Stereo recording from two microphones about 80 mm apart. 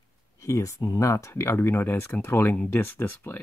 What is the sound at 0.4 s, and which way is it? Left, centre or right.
Speech, left.